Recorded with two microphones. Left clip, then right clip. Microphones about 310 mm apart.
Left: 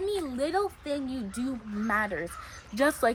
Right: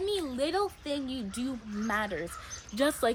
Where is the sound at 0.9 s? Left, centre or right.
Centre.